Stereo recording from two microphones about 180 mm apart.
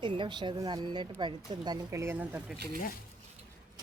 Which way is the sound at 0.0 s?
25° right (ahead or behind).